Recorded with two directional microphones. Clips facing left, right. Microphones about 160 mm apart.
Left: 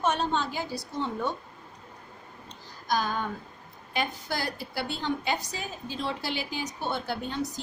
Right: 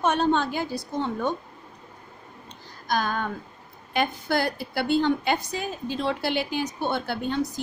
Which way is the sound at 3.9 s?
60° right (ahead or behind).